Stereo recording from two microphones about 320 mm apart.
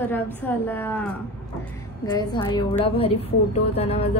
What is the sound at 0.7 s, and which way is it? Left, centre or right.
A woman's voice, centre.